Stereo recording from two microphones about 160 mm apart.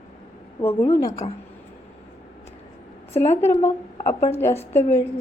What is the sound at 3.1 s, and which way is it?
Speech, 45° left (ahead or behind).